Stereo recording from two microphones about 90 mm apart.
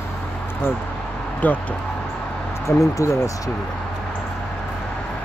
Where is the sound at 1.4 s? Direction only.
20° left (ahead or behind).